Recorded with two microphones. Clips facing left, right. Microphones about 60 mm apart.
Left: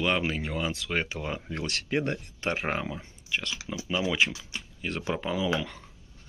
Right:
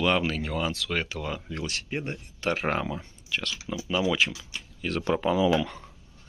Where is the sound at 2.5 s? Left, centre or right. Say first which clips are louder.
Right 3 dB; centre.